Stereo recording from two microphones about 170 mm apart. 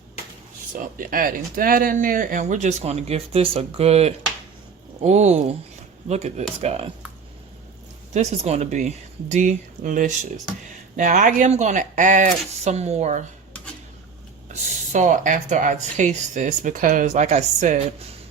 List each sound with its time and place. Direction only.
0.8 s speech: 55° right (ahead or behind); by 6.9 s 35° right (ahead or behind)
8.1 s speech: 40° right (ahead or behind)
14.5 s speech: 45° right (ahead or behind)